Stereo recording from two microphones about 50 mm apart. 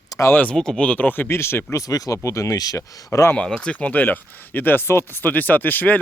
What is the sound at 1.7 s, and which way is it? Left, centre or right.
Speech, left.